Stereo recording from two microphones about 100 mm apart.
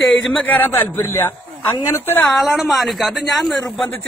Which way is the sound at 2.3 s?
Centre (ahead or behind).